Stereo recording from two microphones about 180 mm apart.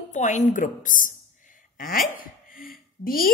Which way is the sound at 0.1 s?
40° left (ahead or behind).